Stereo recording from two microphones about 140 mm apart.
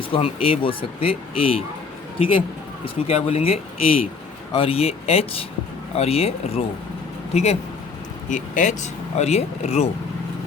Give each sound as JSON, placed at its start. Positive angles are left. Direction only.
{"t": 0.1, "sound": "a man's voice", "side_deg": 40}
{"t": 8.3, "sound": "speech", "side_deg": 65}